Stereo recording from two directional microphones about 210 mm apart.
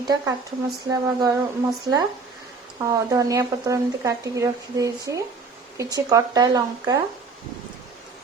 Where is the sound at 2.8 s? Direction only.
15° right (ahead or behind).